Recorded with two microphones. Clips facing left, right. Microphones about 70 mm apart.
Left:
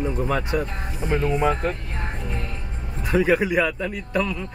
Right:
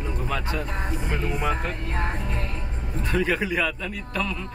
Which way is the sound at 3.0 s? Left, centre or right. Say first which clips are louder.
Left 5 dB; centre.